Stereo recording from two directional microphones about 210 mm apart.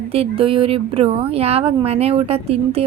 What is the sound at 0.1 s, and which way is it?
A woman's voice, 25° right (ahead or behind).